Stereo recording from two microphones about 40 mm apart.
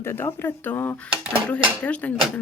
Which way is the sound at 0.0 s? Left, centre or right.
Left.